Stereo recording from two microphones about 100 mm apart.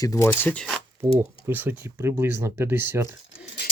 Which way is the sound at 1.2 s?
25° right (ahead or behind).